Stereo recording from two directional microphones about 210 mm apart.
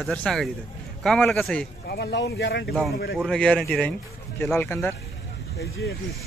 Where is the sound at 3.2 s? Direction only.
5° left (ahead or behind).